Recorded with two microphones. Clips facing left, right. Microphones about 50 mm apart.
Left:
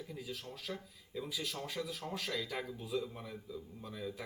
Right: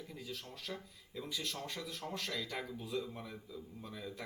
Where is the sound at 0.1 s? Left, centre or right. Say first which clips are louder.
Left 1 dB; centre.